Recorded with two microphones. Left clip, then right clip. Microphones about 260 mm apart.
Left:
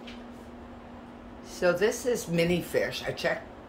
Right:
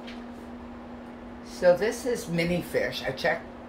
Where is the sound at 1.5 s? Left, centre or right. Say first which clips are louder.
Right 3 dB; centre.